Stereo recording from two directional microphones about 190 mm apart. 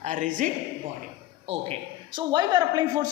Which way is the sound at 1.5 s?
35° right (ahead or behind).